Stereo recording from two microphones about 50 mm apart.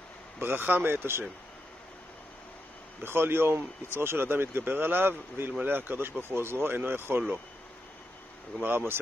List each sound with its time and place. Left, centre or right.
0.4 s a man's voice: right
3.0 s a man's voice: right
8.6 s a man's voice: right